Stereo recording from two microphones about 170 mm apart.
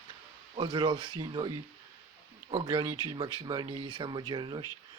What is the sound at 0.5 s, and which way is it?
Speech, 30° right (ahead or behind).